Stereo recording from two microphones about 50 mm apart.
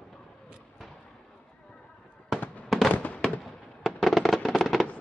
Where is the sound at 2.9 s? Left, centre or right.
Left.